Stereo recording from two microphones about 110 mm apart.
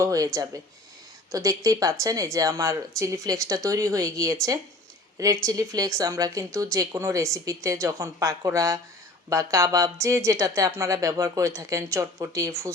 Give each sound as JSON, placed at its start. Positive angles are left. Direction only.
{"t": 0.0, "sound": "speech", "side_deg": -30}